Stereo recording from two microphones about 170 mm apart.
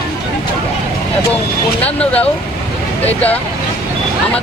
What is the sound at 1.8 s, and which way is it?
Speech, 10° left (ahead or behind).